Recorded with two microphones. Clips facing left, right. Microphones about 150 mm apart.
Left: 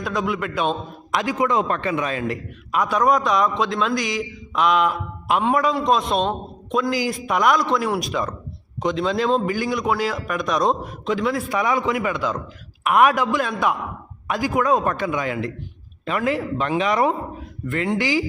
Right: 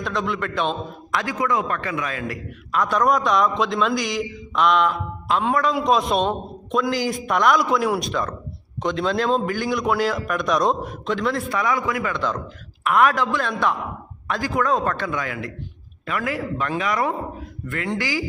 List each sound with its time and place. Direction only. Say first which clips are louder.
0.0 s a man's voice: left 1 dB; 5° left (ahead or behind)
1.1 s a man's voice: left 3 dB; 20° left (ahead or behind)
2.7 s a man's voice: left 1 dB; 5° left (ahead or behind)
5.3 s a man's voice: left 1 dB; 15° left (ahead or behind)
5.7 s a man's voice: even; centre (ahead or behind)
11.4 s a man's voice: left 2 dB; 15° left (ahead or behind)